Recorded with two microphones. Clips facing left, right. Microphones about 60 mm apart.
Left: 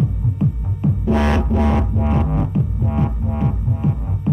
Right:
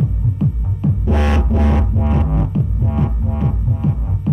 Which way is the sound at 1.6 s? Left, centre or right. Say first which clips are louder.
Even; centre.